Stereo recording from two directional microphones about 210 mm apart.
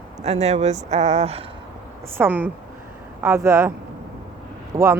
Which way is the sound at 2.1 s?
10° right (ahead or behind).